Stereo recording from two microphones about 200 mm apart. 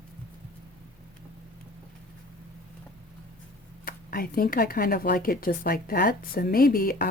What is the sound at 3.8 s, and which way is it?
Speech, 45° left (ahead or behind).